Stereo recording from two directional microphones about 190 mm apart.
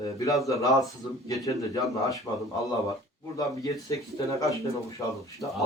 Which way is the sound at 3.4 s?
15° left (ahead or behind).